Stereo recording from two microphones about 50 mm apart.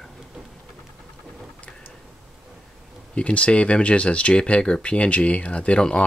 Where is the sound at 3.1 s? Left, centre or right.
Left.